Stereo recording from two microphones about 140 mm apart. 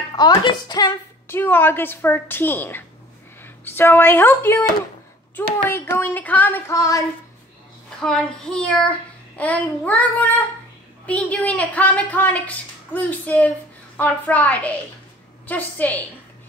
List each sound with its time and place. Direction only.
0.1 s speech: 30° left (ahead or behind)
1.3 s a woman's voice: 15° left (ahead or behind)
8.0 s a child's voice: 5° left (ahead or behind)